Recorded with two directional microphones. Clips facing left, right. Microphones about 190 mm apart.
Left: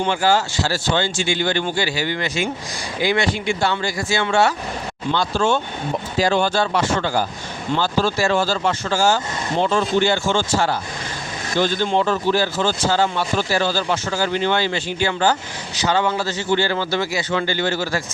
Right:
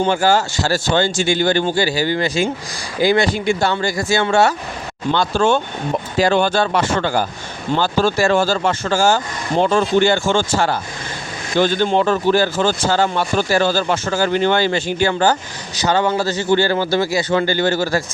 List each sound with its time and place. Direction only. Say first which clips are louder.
0.0 s speech: right 3 dB; 45° right (ahead or behind)
5.1 s speech: right 3 dB; 55° right (ahead or behind)